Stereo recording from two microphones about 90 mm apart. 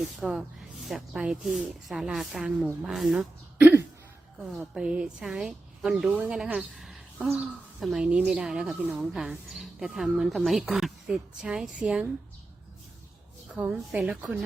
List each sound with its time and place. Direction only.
0.0 s a woman's voice: 5° right (ahead or behind)
4.5 s a woman's voice: 5° right (ahead or behind)
8.7 s speech: 20° right (ahead or behind)
9.0 s a woman's voice: 5° right (ahead or behind)
13.5 s a woman's voice: 15° right (ahead or behind)